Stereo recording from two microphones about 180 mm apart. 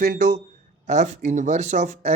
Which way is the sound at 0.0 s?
50° right (ahead or behind).